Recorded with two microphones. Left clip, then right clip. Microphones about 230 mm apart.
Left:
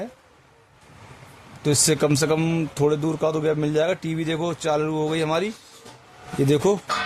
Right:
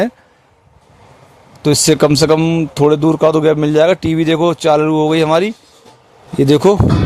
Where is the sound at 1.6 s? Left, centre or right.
Right.